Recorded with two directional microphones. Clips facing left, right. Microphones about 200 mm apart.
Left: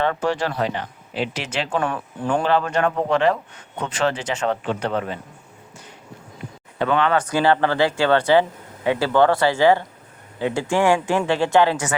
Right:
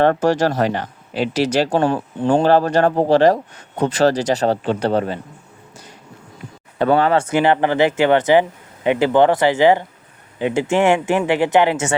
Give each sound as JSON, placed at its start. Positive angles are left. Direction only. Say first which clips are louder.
{"t": 0.0, "sound": "speech", "louder": "right 7 dB", "side_deg": -45}
{"t": 6.7, "sound": "speech", "louder": "right 4 dB", "side_deg": -40}